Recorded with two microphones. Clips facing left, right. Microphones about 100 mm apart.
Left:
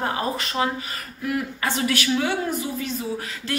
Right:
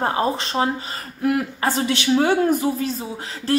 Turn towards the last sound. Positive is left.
turn(degrees=-35)  # may be behind; listen again after turning